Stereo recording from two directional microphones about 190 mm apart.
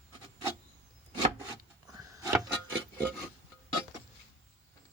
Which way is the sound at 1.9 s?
15° right (ahead or behind).